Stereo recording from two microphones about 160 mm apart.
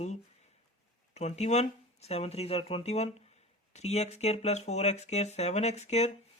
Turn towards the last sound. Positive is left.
turn(degrees=45)  # may be behind; listen again after turning